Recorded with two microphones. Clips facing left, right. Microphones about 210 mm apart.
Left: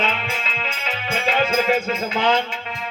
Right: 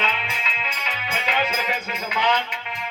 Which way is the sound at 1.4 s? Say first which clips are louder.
Left 9 dB; 45° left (ahead or behind).